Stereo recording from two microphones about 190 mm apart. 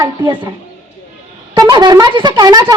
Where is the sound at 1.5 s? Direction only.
20° right (ahead or behind).